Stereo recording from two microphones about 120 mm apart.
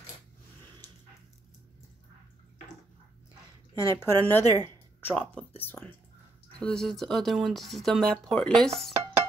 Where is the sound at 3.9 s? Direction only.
20° left (ahead or behind).